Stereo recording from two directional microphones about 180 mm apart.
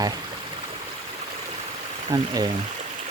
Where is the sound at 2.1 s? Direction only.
20° right (ahead or behind).